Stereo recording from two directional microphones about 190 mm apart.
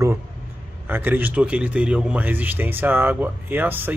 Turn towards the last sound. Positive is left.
turn(degrees=-10)  # may be behind; listen again after turning